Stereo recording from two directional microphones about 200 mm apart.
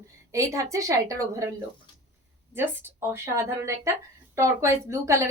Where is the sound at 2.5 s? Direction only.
10° right (ahead or behind).